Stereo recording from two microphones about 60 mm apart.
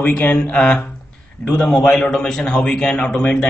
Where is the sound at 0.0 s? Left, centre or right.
Left.